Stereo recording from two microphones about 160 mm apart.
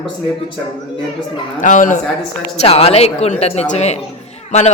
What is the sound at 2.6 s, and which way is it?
Speech, 40° left (ahead or behind).